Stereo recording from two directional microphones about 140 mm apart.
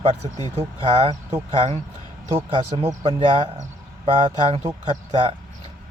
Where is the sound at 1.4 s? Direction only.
45° right (ahead or behind).